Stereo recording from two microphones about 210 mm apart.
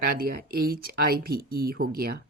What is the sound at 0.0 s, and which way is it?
Speech, 45° right (ahead or behind).